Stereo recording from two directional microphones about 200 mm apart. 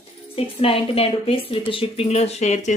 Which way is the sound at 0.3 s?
30° left (ahead or behind).